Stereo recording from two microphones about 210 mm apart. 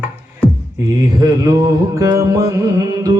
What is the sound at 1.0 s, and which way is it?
Mantra, 15° right (ahead or behind).